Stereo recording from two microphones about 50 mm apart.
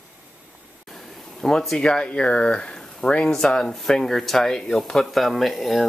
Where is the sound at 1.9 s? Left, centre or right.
Centre.